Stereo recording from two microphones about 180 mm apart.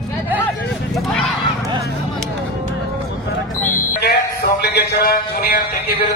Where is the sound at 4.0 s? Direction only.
65° left (ahead or behind).